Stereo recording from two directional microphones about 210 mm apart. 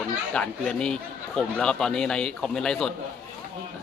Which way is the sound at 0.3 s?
5° left (ahead or behind).